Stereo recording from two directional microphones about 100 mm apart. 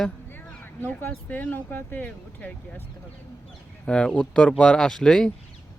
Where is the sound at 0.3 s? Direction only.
20° left (ahead or behind).